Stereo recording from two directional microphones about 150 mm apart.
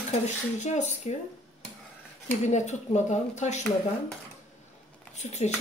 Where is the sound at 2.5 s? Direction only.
50° left (ahead or behind).